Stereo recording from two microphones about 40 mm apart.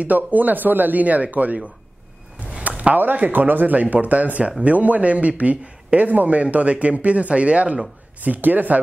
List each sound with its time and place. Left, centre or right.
0.0 s speech: right
2.4 s a sound: right
3.0 s speech: right
8.2 s speech: right